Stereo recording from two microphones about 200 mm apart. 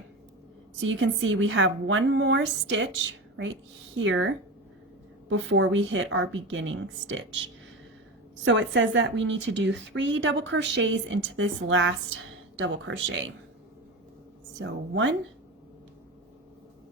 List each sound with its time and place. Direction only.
0.8 s a woman's voice: 70° right (ahead or behind)
5.3 s a woman's voice: 70° right (ahead or behind)
8.4 s a woman's voice: 65° right (ahead or behind)
14.6 s a woman's voice: 70° right (ahead or behind)